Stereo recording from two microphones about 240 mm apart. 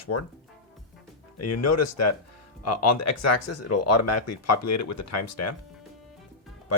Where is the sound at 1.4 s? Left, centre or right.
Left.